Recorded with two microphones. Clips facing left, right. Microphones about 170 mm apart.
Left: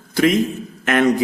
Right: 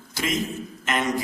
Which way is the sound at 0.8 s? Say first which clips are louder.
Left 10 dB; 65° left (ahead or behind).